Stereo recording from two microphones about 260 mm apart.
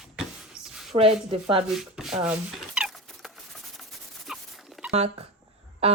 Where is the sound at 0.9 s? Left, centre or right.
Right.